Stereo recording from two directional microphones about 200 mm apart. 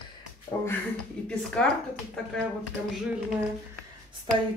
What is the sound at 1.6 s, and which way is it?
Speech, 5° left (ahead or behind).